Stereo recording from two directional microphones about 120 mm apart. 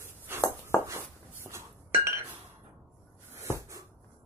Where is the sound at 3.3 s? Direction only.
25° right (ahead or behind).